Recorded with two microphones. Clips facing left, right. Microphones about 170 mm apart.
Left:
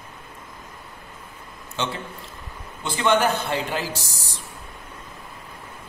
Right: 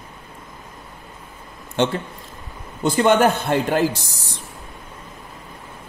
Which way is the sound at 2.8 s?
45° right (ahead or behind).